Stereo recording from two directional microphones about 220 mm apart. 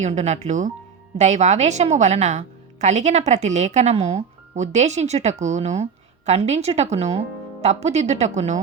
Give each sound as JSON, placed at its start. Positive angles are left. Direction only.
{"t": 0.0, "sound": "speech", "side_deg": -30}